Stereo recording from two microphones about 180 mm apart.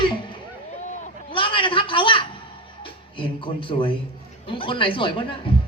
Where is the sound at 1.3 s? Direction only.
30° left (ahead or behind).